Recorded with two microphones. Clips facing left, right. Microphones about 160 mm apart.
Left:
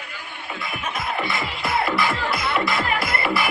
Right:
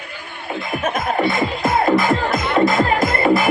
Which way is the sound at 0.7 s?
45° right (ahead or behind).